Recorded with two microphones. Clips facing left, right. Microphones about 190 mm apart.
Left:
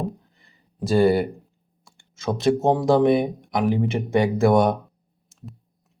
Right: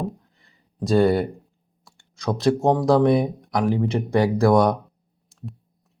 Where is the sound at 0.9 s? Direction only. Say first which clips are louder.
Even; centre (ahead or behind).